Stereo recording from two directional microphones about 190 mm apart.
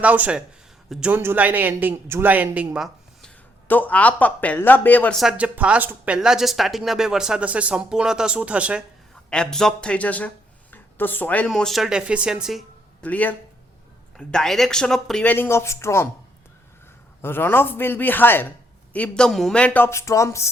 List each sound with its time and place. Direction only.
0.0 s a man's voice: 10° right (ahead or behind); by 5.1 s 10° left (ahead or behind)
5.2 s a man's voice: 5° right (ahead or behind)
9.3 s a man's voice: 5° left (ahead or behind)
17.2 s speech: 10° left (ahead or behind)